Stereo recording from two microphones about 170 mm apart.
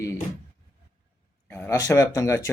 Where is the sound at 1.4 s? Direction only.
10° left (ahead or behind).